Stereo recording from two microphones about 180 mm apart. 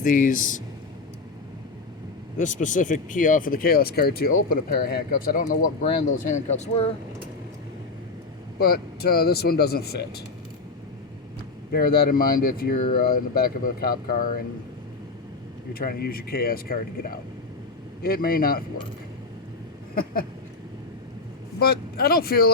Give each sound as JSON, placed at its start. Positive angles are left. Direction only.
{"t": 0.0, "sound": "speech", "side_deg": 50}
{"t": 2.4, "sound": "speech", "side_deg": 45}
{"t": 6.1, "sound": "speech", "side_deg": 40}
{"t": 8.5, "sound": "speech", "side_deg": 60}
{"t": 11.7, "sound": "speech", "side_deg": 60}
{"t": 15.7, "sound": "speech", "side_deg": 55}
{"t": 21.6, "sound": "speech", "side_deg": 60}